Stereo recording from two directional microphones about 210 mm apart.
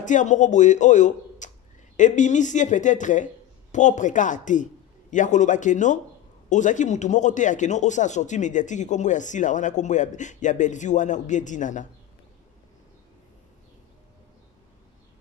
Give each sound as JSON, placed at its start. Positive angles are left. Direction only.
{"t": 0.0, "sound": "speech", "side_deg": 35}